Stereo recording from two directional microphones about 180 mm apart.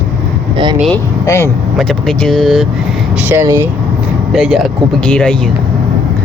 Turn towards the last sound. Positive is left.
turn(degrees=5)  # may be behind; listen again after turning